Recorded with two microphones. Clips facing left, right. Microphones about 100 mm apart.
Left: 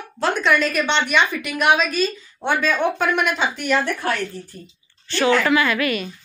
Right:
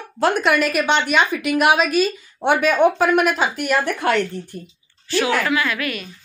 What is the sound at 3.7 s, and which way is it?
Speech, 65° right (ahead or behind).